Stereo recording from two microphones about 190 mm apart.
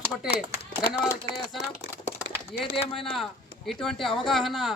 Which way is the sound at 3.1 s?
Centre (ahead or behind).